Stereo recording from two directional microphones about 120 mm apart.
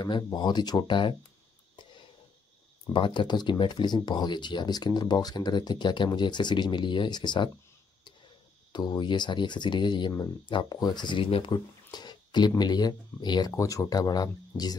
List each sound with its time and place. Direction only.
0.0 s speech: 35° left (ahead or behind)
2.9 s speech: 40° left (ahead or behind)
8.7 s speech: 35° left (ahead or behind)